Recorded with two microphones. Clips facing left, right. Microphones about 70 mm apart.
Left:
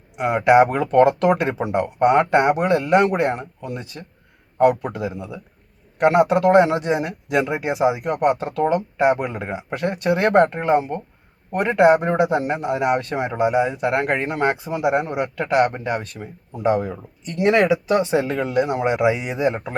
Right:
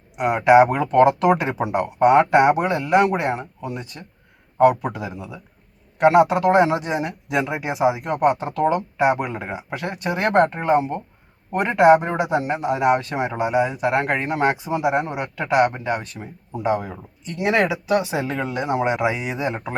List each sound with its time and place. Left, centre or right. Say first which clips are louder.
0.2 s a man's voice: right 1 dB; centre
2.1 s speech: right 3 dB; centre
2.6 s a man's voice: left 1 dB; centre
8.2 s speech: right 1 dB; centre
8.5 s a man's voice: even; centre
13.1 s speech: even; centre
13.4 s a man's voice: left 2 dB; centre
15.4 s speech: right 1 dB; centre
15.7 s a man's voice: even; centre